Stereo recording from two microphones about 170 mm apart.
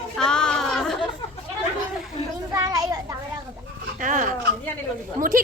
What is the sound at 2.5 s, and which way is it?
Children playing, 20° right (ahead or behind).